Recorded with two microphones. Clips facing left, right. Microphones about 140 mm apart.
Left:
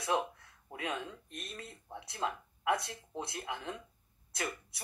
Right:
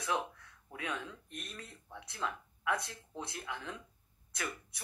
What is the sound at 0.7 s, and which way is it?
Speech, 30° left (ahead or behind).